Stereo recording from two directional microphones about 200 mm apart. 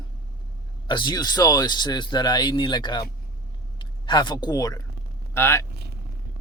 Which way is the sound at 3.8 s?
25° left (ahead or behind).